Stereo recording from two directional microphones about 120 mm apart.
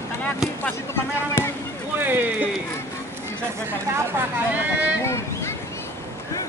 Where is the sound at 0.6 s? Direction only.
20° left (ahead or behind).